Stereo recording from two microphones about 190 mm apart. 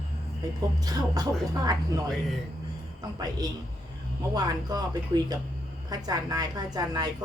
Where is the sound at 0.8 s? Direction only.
20° right (ahead or behind).